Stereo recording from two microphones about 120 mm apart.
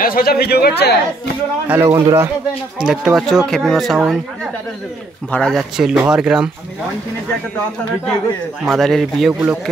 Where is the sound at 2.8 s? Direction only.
5° right (ahead or behind).